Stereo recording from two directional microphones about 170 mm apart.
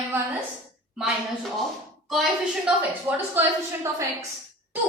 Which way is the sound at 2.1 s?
Centre (ahead or behind).